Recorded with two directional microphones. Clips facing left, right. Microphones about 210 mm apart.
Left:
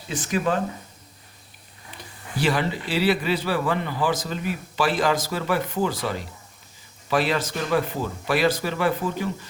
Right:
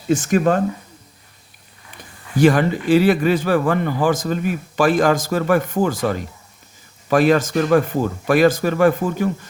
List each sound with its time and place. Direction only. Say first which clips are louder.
0.1 s speech: right 8 dB; 45° right (ahead or behind)
2.4 s speech: right 9 dB; 50° right (ahead or behind)